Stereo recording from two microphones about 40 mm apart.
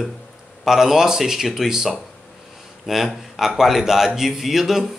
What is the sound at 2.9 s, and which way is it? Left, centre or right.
Speech, centre.